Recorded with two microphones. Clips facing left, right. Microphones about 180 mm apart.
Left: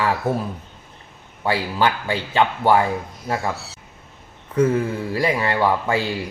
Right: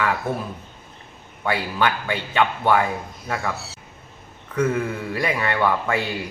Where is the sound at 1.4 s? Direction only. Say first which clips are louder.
Left 2 dB; 30° left (ahead or behind).